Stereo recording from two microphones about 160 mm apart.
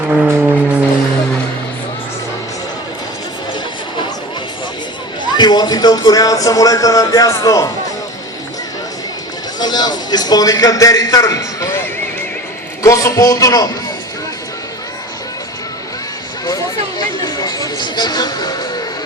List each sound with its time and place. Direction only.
0.1 s vehicle: 10° right (ahead or behind)
5.4 s speech: 25° left (ahead or behind)
9.6 s speech: 25° left (ahead or behind)
12.8 s speech: 20° left (ahead or behind)
17.2 s a sound: 25° left (ahead or behind)